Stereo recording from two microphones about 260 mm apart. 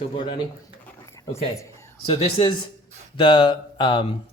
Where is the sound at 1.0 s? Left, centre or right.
Centre.